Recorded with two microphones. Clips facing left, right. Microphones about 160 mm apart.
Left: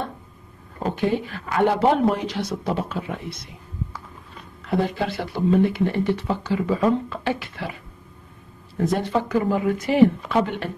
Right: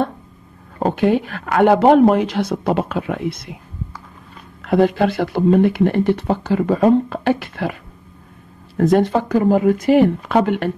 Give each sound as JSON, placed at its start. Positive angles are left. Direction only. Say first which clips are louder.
{"t": 0.7, "sound": "speech", "louder": "right 7 dB", "side_deg": -65}
{"t": 4.6, "sound": "speech", "louder": "right 8 dB", "side_deg": -65}
{"t": 8.7, "sound": "speech", "louder": "right 7 dB", "side_deg": -70}
{"t": 9.3, "sound": "speech", "louder": "right 8 dB", "side_deg": -45}